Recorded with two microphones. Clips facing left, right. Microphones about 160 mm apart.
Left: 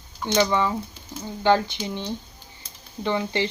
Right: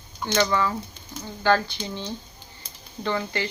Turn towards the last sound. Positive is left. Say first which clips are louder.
# left 3 dB
turn(degrees=20)  # may be behind; listen again after turning